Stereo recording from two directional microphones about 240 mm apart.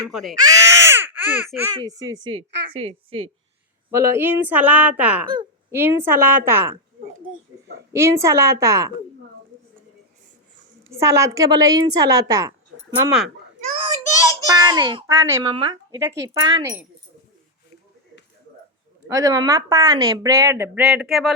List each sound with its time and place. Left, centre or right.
0.1 s speech: centre
0.3 s speech: centre
3.9 s speech: centre
7.9 s speech: centre
10.9 s speech: centre
13.9 s a child's voice: centre
19.0 s speech: centre